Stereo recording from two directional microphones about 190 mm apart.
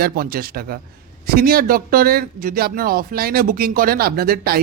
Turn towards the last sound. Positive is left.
turn(degrees=-55)  # may be behind; listen again after turning